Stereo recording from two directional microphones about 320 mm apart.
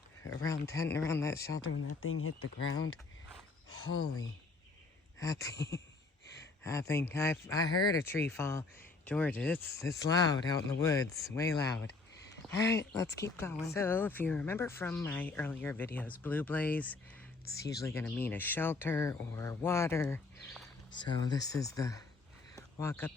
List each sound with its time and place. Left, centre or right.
0.2 s speech: centre
1.5 s speech: left
3.7 s a sound: left
5.2 s speech: centre
6.6 s speech: centre
13.2 s speech: centre
22.5 s a sound: centre